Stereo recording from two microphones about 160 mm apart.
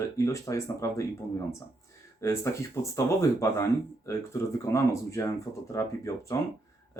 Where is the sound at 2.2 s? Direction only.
15° left (ahead or behind).